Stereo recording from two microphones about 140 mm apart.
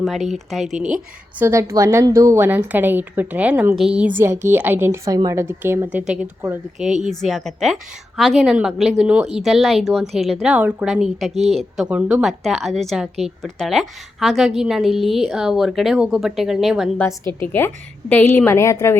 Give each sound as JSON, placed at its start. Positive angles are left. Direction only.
{"t": 0.0, "sound": "a woman's voice", "side_deg": 0}
{"t": 1.4, "sound": "a woman's voice", "side_deg": -20}
{"t": 7.0, "sound": "a woman's voice", "side_deg": 0}
{"t": 17.4, "sound": "a woman's voice", "side_deg": 15}